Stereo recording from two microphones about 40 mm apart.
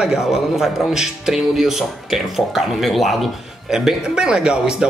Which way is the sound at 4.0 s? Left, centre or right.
Right.